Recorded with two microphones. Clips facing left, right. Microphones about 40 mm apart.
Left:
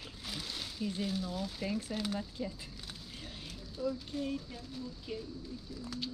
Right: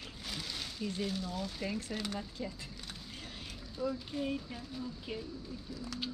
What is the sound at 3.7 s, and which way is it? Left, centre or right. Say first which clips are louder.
Speech: even; centre.